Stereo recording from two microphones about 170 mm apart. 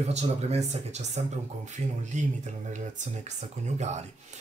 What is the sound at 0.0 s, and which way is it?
Speech, 40° right (ahead or behind).